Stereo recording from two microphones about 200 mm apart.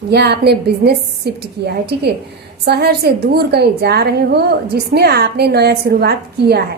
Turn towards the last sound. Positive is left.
turn(degrees=-55)  # may be behind; listen again after turning